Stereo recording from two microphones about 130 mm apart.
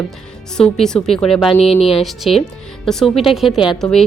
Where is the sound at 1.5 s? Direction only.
50° left (ahead or behind).